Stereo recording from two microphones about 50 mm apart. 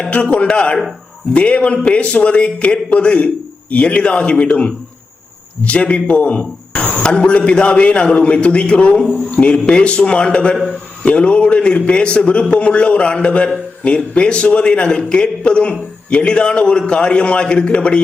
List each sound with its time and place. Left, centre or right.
0.1 s a man's voice: left